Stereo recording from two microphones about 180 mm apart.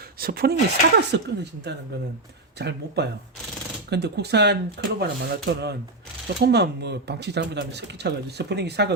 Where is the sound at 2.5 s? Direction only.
65° right (ahead or behind).